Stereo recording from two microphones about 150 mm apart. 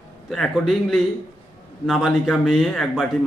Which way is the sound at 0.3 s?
Centre (ahead or behind).